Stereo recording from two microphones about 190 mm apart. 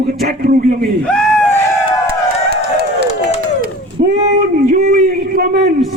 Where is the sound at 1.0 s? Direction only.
5° left (ahead or behind).